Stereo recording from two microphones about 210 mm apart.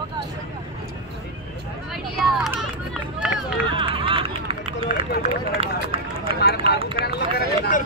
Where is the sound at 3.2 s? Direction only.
5° right (ahead or behind).